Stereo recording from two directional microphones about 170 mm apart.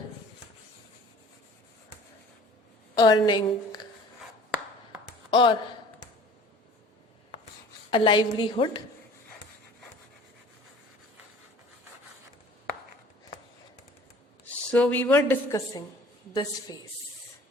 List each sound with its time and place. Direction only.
2.9 s a woman's voice: 25° left (ahead or behind)
5.3 s a woman's voice: 30° left (ahead or behind)
7.9 s a woman's voice: 30° left (ahead or behind)
14.7 s a woman's voice: 10° left (ahead or behind); by 16.7 s 25° left (ahead or behind)